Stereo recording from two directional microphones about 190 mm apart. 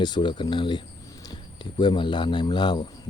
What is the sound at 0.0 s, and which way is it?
Speech, 25° left (ahead or behind).